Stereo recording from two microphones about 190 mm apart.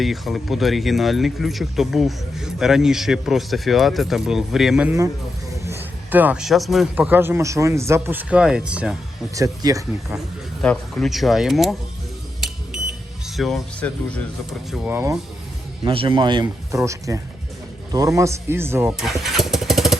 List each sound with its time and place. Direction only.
0.0 s a man's voice: centre (ahead or behind)
9.3 s a man's voice: 15° right (ahead or behind)
10.6 s speech: centre (ahead or behind)
13.2 s speech: centre (ahead or behind)
14.7 s a man's voice: 10° right (ahead or behind)
15.8 s a man's voice: 25° right (ahead or behind); by 18.9 s 10° right (ahead or behind)
18.9 s vehicle: centre (ahead or behind)